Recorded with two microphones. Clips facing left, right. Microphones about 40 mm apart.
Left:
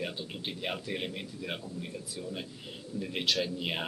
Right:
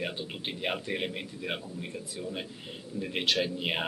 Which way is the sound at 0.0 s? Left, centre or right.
Right.